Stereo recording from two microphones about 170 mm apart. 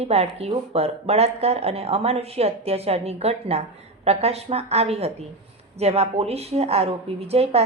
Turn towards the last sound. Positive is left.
turn(degrees=-35)  # may be behind; listen again after turning